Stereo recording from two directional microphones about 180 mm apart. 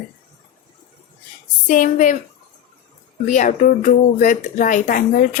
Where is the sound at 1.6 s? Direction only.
45° left (ahead or behind).